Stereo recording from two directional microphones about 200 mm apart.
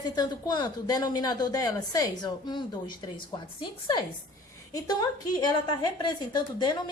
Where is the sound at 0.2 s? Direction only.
20° left (ahead or behind).